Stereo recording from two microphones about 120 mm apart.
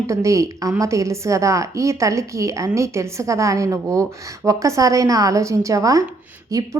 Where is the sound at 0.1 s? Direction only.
25° right (ahead or behind).